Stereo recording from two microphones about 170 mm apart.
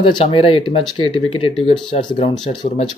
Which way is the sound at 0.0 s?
30° left (ahead or behind).